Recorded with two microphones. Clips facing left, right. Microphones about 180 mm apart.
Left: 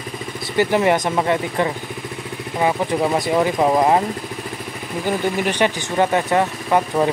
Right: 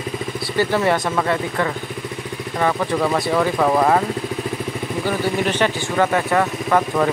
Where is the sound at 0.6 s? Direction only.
15° left (ahead or behind).